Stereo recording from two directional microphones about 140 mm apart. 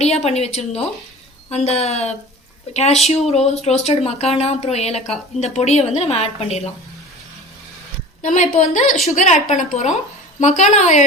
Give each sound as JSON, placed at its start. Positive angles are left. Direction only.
{"t": 0.0, "sound": "speech", "side_deg": 50}
{"t": 8.2, "sound": "a woman's voice", "side_deg": 60}